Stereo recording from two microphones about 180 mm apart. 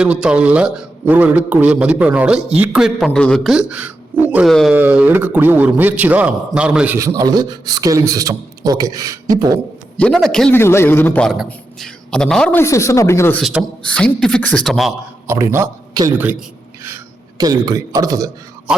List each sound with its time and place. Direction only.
0.0 s a man's voice: 5° right (ahead or behind); by 9.6 s 20° right (ahead or behind)
10.0 s speech: 5° left (ahead or behind)
10.6 s a man's voice: 15° left (ahead or behind)
13.4 s speech: 5° right (ahead or behind)
15.3 s a man's voice: 15° right (ahead or behind)